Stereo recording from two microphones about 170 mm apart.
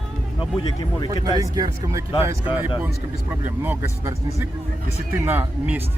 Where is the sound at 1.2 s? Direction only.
20° right (ahead or behind).